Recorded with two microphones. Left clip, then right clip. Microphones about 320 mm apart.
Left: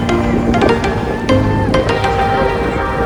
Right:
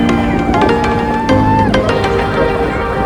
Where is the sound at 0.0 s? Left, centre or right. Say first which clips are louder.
Right 2 dB; centre.